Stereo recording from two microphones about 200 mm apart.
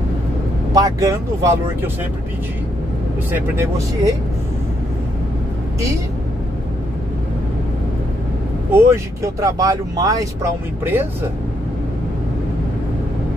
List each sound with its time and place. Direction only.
0.7 s speech: 15° right (ahead or behind)
3.3 s speech: 10° right (ahead or behind)
8.7 s speech: 15° right (ahead or behind)